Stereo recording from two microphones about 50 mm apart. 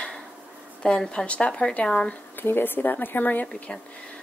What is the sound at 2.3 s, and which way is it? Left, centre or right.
Speech, left.